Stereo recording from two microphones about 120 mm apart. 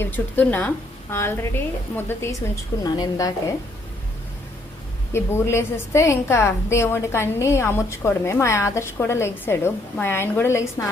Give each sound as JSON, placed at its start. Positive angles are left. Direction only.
{"t": 0.0, "sound": "a woman's voice", "side_deg": 15}
{"t": 2.8, "sound": "a woman's voice", "side_deg": 30}
{"t": 5.1, "sound": "a woman's voice", "side_deg": 20}